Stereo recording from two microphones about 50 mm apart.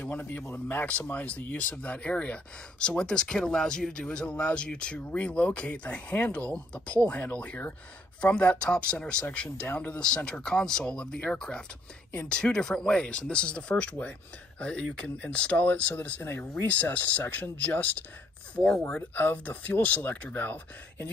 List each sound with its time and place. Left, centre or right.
0.2 s a man's voice: left
0.8 s speech: left
16.6 s speech: left